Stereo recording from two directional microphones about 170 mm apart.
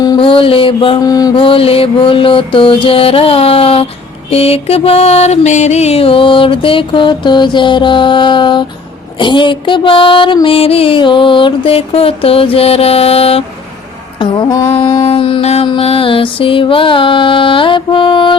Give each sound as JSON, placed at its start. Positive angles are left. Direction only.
{"t": 0.0, "sound": "mantra", "side_deg": 25}
{"t": 14.2, "sound": "a sound", "side_deg": 25}
{"t": 14.7, "sound": "mantra", "side_deg": 30}